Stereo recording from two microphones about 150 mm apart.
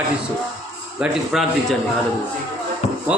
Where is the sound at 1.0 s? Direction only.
Centre (ahead or behind).